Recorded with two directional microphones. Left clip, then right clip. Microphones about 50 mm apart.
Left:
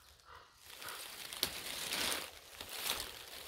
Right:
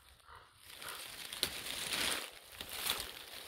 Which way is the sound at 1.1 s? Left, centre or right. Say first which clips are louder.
Right 1 dB; left.